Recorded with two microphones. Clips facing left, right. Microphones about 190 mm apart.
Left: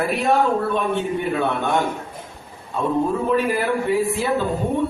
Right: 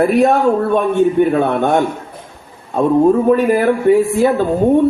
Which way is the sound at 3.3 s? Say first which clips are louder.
Right 7 dB; 50° right (ahead or behind).